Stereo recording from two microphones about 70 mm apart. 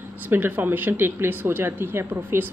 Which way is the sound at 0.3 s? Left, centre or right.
Right.